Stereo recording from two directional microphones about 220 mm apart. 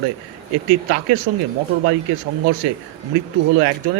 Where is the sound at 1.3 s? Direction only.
40° right (ahead or behind).